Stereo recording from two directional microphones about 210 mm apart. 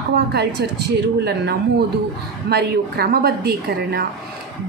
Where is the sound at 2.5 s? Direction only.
50° right (ahead or behind).